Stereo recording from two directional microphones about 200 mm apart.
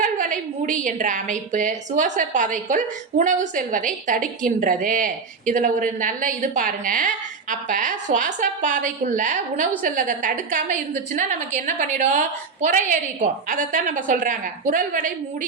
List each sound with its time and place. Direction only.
0.0 s a woman's voice: 40° right (ahead or behind)